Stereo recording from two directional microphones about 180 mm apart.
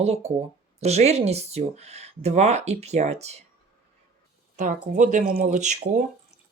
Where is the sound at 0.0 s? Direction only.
35° right (ahead or behind).